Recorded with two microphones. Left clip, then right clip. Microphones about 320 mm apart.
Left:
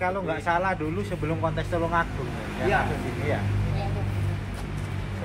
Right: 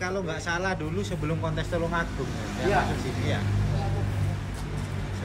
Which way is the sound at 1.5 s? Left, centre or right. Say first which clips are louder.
Left 1 dB; centre.